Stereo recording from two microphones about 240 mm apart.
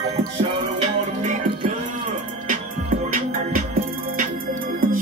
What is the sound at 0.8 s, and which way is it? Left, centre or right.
Music, right.